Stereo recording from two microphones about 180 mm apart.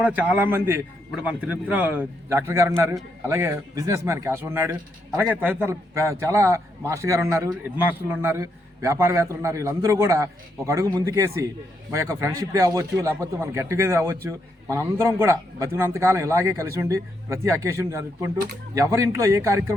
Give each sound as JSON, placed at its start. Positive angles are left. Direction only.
{"t": 0.0, "sound": "speech", "side_deg": -10}